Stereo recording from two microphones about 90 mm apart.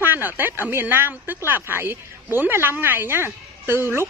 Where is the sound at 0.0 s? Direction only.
20° right (ahead or behind).